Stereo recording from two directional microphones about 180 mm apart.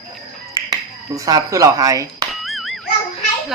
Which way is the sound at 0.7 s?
20° right (ahead or behind).